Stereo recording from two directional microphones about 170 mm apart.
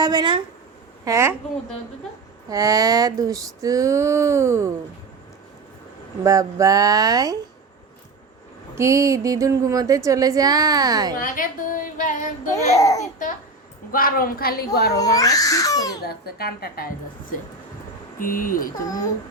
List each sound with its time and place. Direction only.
0.0 s speech: 25° right (ahead or behind)
1.0 s speech: 15° right (ahead or behind)
2.5 s speech: 20° right (ahead or behind)
6.2 s speech: 20° right (ahead or behind)
8.7 s speech: 15° right (ahead or behind)
11.2 s a sound: 50° left (ahead or behind)
12.5 s speech: 20° left (ahead or behind)
13.0 s a sound: 50° left (ahead or behind)
13.9 s a woman's voice: 60° left (ahead or behind)
14.9 s speech: 20° left (ahead or behind)
16.0 s a woman's voice: 65° left (ahead or behind)
18.2 s a woman's voice: 55° left (ahead or behind)